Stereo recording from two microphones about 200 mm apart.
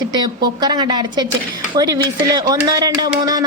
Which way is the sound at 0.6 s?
20° right (ahead or behind).